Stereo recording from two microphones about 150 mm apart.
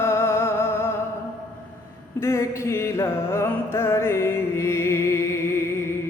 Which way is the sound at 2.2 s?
20° left (ahead or behind).